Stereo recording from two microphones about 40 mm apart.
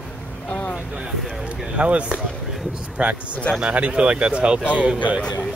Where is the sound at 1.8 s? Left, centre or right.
Right.